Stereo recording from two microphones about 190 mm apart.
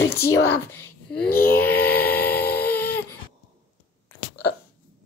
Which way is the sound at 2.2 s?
55° left (ahead or behind).